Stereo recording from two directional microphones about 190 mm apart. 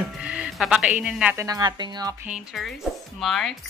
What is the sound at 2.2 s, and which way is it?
Speech, centre (ahead or behind).